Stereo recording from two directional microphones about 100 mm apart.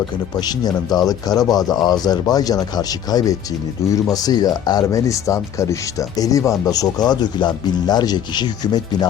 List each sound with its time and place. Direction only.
0.3 s speech: 45° left (ahead or behind)